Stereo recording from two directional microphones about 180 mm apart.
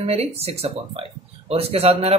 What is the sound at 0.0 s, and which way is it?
Speech, 35° right (ahead or behind).